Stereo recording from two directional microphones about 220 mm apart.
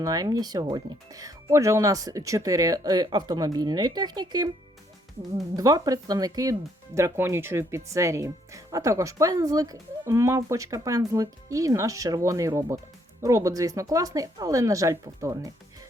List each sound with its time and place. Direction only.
0.0 s speech: 15° right (ahead or behind)
5.5 s speech: 15° right (ahead or behind)